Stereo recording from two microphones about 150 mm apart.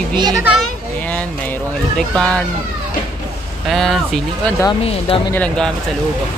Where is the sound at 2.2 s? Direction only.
5° left (ahead or behind).